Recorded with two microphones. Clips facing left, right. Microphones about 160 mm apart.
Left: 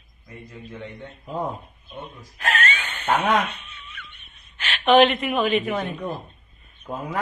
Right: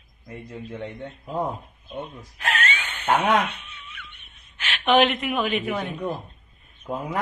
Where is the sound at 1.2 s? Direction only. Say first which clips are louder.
Right 1 dB; 10° right (ahead or behind).